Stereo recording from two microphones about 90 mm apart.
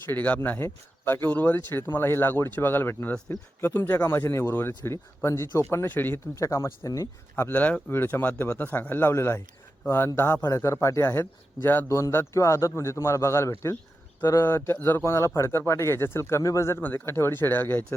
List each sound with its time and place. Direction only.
0.1 s a man's voice: 15° left (ahead or behind)
6.4 s a man's voice: 35° left (ahead or behind)
7.5 s a man's voice: 15° left (ahead or behind); by 11.0 s 35° left (ahead or behind)
11.0 s speech: 25° left (ahead or behind)
11.9 s a man's voice: 35° left (ahead or behind)
16.8 s speech: 25° left (ahead or behind)